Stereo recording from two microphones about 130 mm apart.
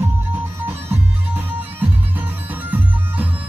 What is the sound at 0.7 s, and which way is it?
Music, 15° right (ahead or behind).